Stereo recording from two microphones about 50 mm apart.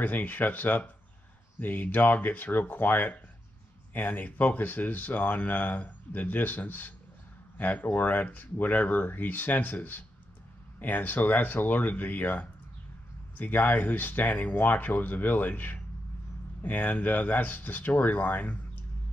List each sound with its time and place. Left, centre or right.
0.0 s speech: left